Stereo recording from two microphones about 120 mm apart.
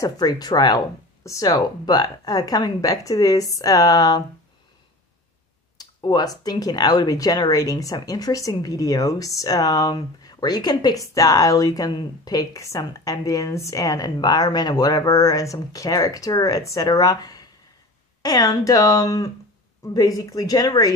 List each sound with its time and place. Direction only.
0.0 s speech: 35° left (ahead or behind)
5.8 s speech: 35° left (ahead or behind)